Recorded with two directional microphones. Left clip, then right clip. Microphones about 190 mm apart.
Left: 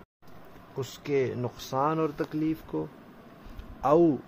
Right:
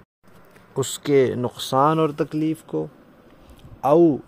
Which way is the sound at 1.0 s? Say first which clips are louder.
Right 9 dB; 45° right (ahead or behind).